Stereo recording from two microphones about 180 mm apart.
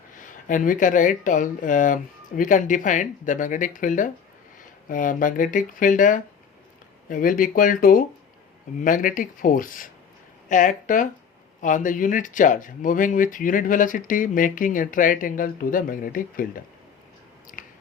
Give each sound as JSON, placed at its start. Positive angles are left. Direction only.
{"t": 0.2, "sound": "speech", "side_deg": 45}